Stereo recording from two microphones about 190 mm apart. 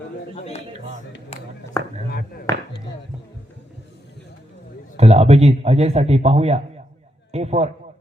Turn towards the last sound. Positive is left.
turn(degrees=-35)  # may be behind; listen again after turning